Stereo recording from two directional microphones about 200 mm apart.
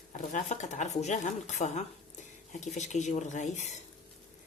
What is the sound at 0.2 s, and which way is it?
Speech, 35° left (ahead or behind).